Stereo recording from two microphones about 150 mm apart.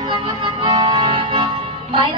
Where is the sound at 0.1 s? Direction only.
35° right (ahead or behind).